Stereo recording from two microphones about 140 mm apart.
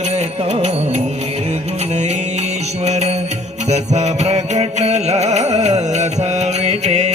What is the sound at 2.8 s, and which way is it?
Music, 50° right (ahead or behind).